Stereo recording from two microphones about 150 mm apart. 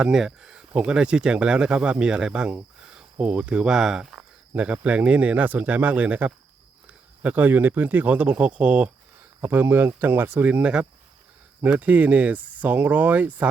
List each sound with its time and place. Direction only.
0.0 s speech: centre (ahead or behind)